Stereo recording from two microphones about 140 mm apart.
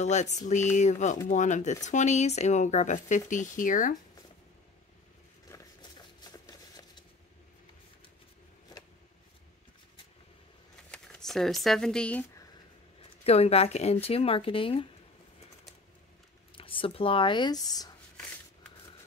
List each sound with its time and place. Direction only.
0.0 s speech: 55° left (ahead or behind)
5.5 s a sound: 30° left (ahead or behind)
10.9 s speech: 5° left (ahead or behind)
13.2 s speech: 45° left (ahead or behind)
16.5 s speech: 40° left (ahead or behind)